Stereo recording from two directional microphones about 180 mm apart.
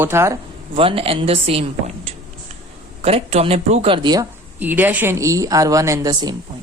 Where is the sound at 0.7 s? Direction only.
30° right (ahead or behind).